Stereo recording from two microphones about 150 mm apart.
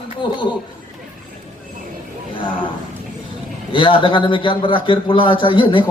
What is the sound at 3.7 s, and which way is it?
A man's voice, 35° left (ahead or behind).